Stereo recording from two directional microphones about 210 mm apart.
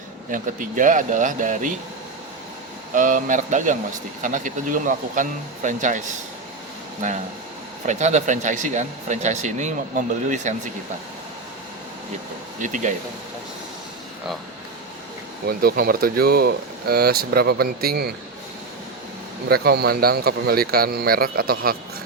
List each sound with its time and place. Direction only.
0.3 s speech: 40° right (ahead or behind)
2.9 s speech: 40° right (ahead or behind)
7.9 s speech: 35° right (ahead or behind)
12.6 s speech: 35° right (ahead or behind)
15.4 s speech: 45° right (ahead or behind)
19.5 s speech: 50° right (ahead or behind)